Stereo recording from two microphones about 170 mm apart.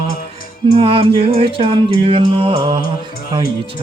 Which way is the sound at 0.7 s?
30° right (ahead or behind).